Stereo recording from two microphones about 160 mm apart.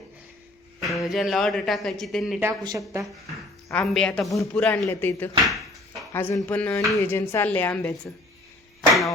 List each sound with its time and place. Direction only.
0.9 s speech: centre (ahead or behind)
2.4 s speech: 20° right (ahead or behind)
3.7 s a woman's voice: 5° left (ahead or behind)
5.5 s a sound: centre (ahead or behind)
6.1 s a woman's voice: 15° left (ahead or behind)